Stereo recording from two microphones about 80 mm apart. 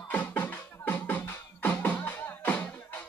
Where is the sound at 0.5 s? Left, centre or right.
Left.